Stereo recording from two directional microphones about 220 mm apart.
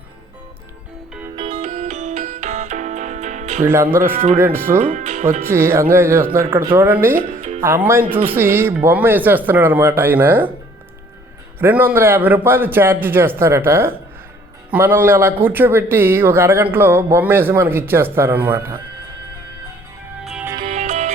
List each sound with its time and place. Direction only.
1.5 s music: 35° right (ahead or behind)
3.6 s speech: 10° right (ahead or behind)
4.9 s music: 35° right (ahead or behind)
5.5 s speech: 10° right (ahead or behind)
7.2 s music: 40° right (ahead or behind)
7.6 s speech: 10° right (ahead or behind)
11.6 s speech: 10° right (ahead or behind)
20.2 s music: 5° right (ahead or behind)
20.7 s music: 35° right (ahead or behind)